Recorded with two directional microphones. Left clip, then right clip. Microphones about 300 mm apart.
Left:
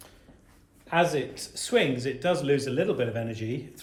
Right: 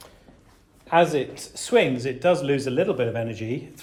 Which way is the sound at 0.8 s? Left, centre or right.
Right.